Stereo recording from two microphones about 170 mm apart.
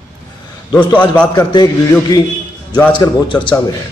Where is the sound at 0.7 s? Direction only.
25° left (ahead or behind).